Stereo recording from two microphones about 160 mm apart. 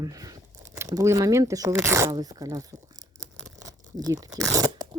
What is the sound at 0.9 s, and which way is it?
Speech, 20° right (ahead or behind).